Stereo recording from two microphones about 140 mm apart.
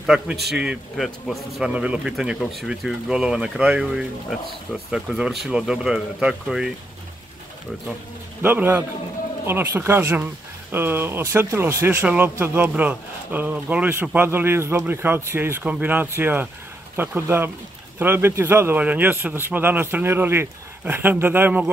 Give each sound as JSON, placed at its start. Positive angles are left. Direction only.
{"t": 0.0, "sound": "speech", "side_deg": -5}
{"t": 8.4, "sound": "speech", "side_deg": -15}